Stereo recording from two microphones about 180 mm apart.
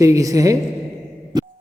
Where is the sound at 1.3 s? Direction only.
20° right (ahead or behind).